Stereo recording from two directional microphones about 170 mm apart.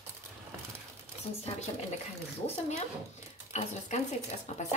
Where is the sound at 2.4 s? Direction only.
40° left (ahead or behind).